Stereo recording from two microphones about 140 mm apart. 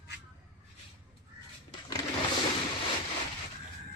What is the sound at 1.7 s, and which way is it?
Sewing machine, 30° left (ahead or behind).